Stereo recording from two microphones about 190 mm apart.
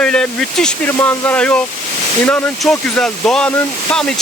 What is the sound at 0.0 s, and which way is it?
Speech, 5° left (ahead or behind).